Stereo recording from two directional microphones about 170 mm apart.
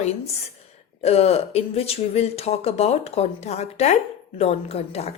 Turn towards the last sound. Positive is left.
turn(degrees=35)  # may be behind; listen again after turning